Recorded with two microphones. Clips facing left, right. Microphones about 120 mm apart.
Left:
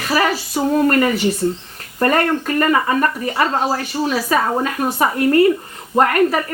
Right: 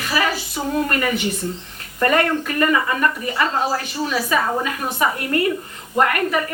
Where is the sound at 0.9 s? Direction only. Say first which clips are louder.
Left 6 dB; 40° left (ahead or behind).